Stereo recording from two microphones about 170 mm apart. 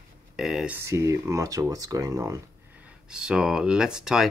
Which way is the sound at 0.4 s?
Centre (ahead or behind).